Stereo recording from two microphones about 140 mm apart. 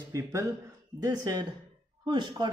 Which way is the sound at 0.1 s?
25° right (ahead or behind).